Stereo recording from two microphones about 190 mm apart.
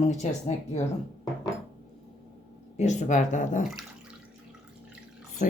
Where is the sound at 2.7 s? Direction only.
35° left (ahead or behind).